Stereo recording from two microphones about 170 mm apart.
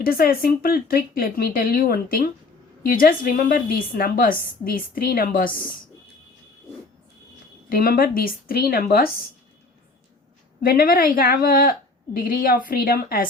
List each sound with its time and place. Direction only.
0.0 s a woman's voice: 60° left (ahead or behind)
7.7 s a woman's voice: 55° left (ahead or behind)
10.6 s a woman's voice: 60° left (ahead or behind)